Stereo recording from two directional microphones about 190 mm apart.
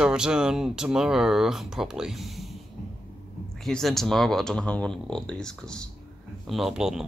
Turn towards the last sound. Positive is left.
turn(degrees=-5)  # may be behind; listen again after turning